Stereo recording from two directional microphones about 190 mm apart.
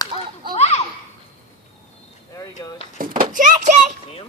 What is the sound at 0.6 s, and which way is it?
Children playing, 35° left (ahead or behind).